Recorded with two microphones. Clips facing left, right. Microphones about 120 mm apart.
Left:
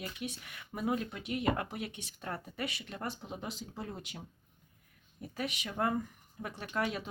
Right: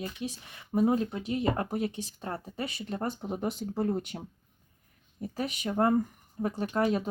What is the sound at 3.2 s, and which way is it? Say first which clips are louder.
Speech: right 9 dB; 50° right (ahead or behind).